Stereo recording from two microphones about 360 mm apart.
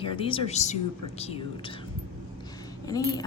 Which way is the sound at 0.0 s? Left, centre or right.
Centre.